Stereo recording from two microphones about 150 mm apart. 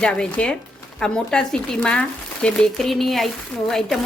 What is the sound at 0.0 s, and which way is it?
Speech, 5° left (ahead or behind).